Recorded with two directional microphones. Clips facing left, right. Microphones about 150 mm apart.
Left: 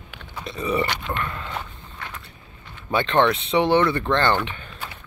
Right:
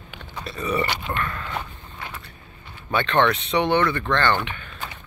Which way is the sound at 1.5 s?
10° right (ahead or behind).